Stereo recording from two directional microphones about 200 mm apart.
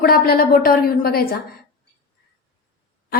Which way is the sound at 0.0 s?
45° left (ahead or behind).